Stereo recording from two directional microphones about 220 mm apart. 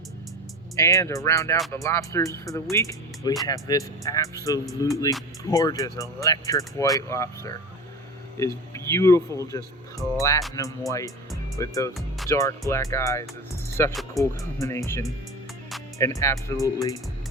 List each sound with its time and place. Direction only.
0.8 s speech: 15° left (ahead or behind)